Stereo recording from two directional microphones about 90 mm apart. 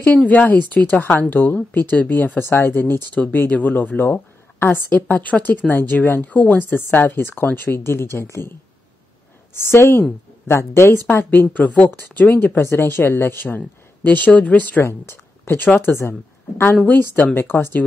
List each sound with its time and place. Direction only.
0.0 s speech: 20° left (ahead or behind)
9.7 s speech: 30° left (ahead or behind)
14.8 s speech: 30° left (ahead or behind)